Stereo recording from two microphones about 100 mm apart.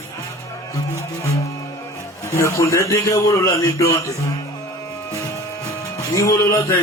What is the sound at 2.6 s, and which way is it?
A man's voice, 30° left (ahead or behind).